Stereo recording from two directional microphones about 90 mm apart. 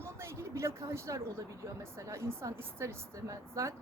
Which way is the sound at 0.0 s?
30° right (ahead or behind).